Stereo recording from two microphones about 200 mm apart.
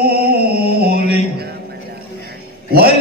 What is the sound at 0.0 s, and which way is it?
Music, 50° right (ahead or behind).